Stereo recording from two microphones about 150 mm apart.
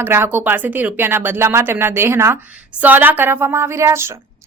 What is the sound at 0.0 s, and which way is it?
A woman's voice, 15° right (ahead or behind).